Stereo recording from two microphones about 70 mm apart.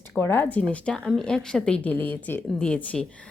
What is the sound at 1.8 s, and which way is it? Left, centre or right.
Speech, left.